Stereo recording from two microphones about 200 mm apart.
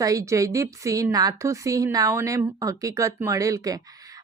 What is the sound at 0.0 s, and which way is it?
Speech, 15° right (ahead or behind).